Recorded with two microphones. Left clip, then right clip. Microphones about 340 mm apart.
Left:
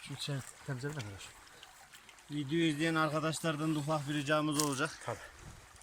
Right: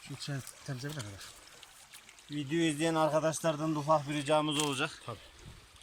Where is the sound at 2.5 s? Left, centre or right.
Centre.